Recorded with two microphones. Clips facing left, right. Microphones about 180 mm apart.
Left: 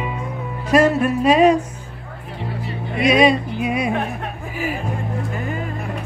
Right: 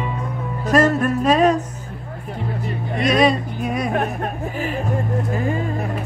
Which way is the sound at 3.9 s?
45° right (ahead or behind).